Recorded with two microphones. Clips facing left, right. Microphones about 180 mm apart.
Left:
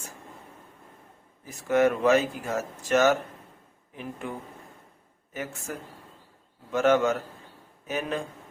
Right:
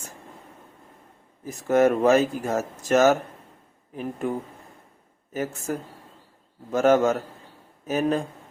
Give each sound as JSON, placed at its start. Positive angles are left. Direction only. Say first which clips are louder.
{"t": 1.5, "sound": "speech", "louder": "right 3 dB", "side_deg": -40}